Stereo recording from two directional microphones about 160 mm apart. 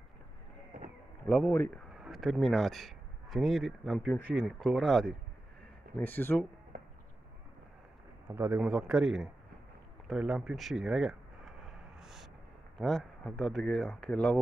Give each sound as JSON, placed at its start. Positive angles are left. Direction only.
{"t": 0.7, "sound": "a sound", "side_deg": -55}
{"t": 1.2, "sound": "a man's voice", "side_deg": 10}
{"t": 2.0, "sound": "a man's voice", "side_deg": 0}
{"t": 8.3, "sound": "speech", "side_deg": -10}
{"t": 10.0, "sound": "a sound", "side_deg": -5}
{"t": 12.7, "sound": "speech", "side_deg": 5}